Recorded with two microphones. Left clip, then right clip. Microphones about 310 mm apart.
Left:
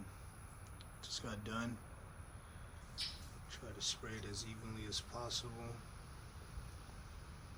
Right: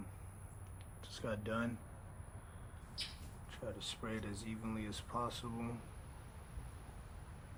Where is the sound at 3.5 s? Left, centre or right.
Centre.